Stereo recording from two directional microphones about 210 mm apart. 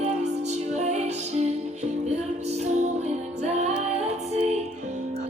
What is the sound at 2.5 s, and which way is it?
Music, 30° right (ahead or behind).